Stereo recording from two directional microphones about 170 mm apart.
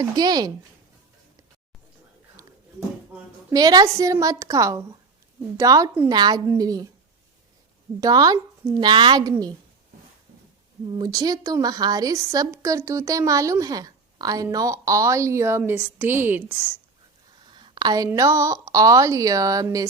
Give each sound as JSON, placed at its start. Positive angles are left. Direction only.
{"t": 0.0, "sound": "a woman's voice", "side_deg": -25}
{"t": 3.5, "sound": "a woman's voice", "side_deg": -20}
{"t": 8.0, "sound": "a woman's voice", "side_deg": -20}
{"t": 10.9, "sound": "a woman's voice", "side_deg": -20}
{"t": 17.4, "sound": "a woman's voice", "side_deg": -25}